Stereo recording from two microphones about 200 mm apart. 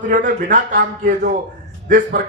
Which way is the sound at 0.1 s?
40° right (ahead or behind).